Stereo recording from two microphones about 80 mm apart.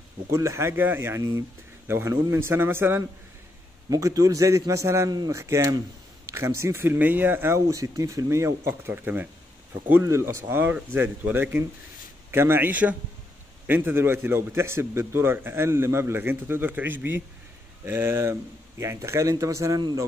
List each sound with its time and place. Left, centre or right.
0.3 s a man's voice: right
3.9 s a man's voice: right
10.0 s a man's voice: right